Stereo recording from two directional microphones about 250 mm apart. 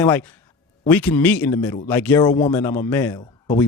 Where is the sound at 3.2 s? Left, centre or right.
Left.